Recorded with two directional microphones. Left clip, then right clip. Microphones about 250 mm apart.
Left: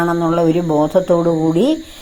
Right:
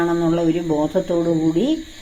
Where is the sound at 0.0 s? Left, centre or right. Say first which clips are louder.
Left 4 dB; left.